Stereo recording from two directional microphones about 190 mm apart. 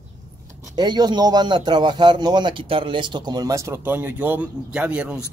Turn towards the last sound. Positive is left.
turn(degrees=-5)  # may be behind; listen again after turning